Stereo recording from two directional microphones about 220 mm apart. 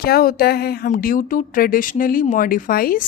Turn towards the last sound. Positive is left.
turn(degrees=40)  # may be behind; listen again after turning